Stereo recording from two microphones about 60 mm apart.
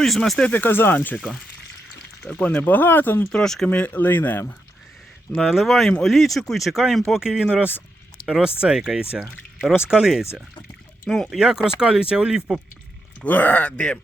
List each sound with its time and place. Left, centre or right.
0.0 s speech: centre
0.5 s speech: left
2.5 s speech: left
3.3 s speech: centre
3.7 s speech: left
5.3 s speech: centre
7.5 s speech: right
13.2 s speech: left